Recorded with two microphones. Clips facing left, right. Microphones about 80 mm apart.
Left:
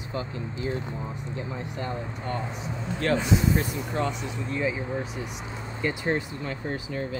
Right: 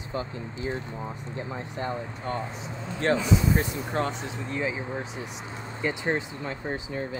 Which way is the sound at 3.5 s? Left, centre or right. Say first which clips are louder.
Even; right.